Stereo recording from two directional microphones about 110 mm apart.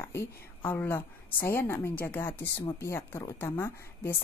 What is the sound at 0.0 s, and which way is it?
A woman's voice, 20° left (ahead or behind).